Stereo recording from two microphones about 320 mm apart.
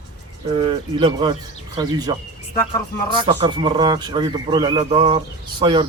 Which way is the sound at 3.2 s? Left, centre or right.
Centre.